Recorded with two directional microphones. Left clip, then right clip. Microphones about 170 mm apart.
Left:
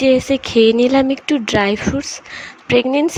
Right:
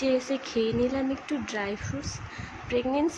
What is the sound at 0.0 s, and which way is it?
Speech, 50° left (ahead or behind).